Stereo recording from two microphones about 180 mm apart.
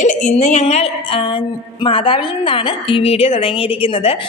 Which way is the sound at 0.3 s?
40° left (ahead or behind).